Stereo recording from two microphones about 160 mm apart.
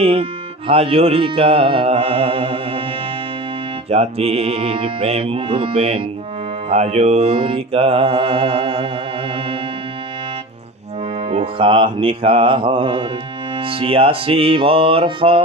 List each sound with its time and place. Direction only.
0.0 s mantra: 35° right (ahead or behind)
3.8 s mantra: 40° right (ahead or behind)
11.3 s mantra: 35° right (ahead or behind)